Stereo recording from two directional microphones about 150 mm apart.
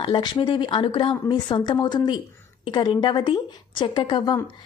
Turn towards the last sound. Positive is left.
turn(degrees=30)  # may be behind; listen again after turning